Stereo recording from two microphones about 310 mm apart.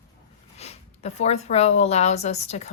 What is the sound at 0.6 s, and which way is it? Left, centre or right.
Speech, left.